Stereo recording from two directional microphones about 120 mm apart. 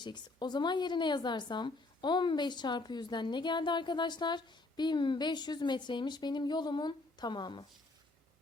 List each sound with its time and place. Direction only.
0.0 s a woman's voice: 40° left (ahead or behind)